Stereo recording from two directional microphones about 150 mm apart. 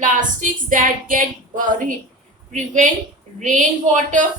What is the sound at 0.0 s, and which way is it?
A woman's voice, 60° right (ahead or behind).